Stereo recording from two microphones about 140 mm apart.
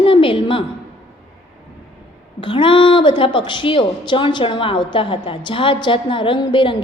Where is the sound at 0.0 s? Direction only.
40° left (ahead or behind).